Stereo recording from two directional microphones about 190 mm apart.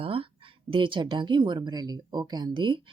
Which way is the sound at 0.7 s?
25° right (ahead or behind).